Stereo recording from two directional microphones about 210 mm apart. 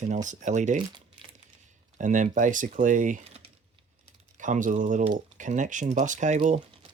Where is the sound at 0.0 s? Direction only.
35° right (ahead or behind).